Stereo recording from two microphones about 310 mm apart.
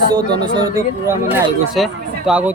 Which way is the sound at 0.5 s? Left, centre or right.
Centre.